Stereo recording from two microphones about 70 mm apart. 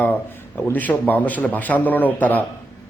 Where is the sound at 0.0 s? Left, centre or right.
Left.